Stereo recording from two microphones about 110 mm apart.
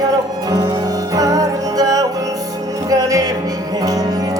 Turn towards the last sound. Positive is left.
turn(degrees=-35)  # may be behind; listen again after turning